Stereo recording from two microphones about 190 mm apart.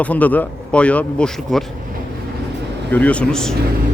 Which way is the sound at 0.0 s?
10° left (ahead or behind).